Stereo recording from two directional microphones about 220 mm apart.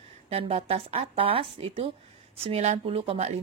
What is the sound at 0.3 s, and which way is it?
Speech, 25° right (ahead or behind).